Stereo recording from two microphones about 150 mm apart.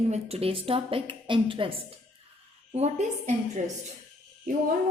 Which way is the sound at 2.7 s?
45° right (ahead or behind).